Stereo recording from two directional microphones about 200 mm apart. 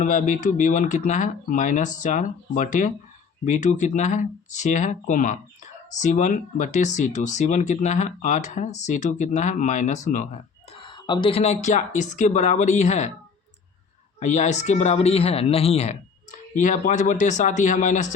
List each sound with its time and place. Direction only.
0.0 s speech: 40° left (ahead or behind)
10.7 s speech: 25° left (ahead or behind)
14.2 s speech: 35° left (ahead or behind)